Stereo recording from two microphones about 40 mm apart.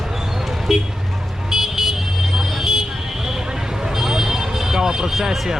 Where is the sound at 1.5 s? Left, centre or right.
Centre.